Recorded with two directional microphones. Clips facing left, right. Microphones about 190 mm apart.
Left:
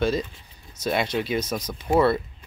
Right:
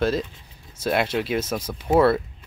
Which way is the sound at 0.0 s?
Centre (ahead or behind).